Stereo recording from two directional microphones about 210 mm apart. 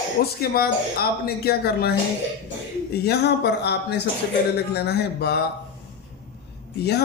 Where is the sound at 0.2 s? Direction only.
45° left (ahead or behind).